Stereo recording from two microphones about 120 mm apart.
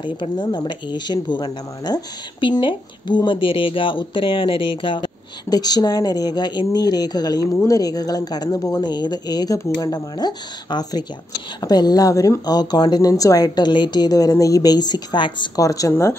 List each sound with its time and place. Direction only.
0.0 s speech: 40° left (ahead or behind); by 16.2 s 20° left (ahead or behind)